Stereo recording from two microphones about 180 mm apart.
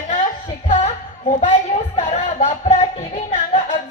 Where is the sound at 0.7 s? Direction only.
45° left (ahead or behind).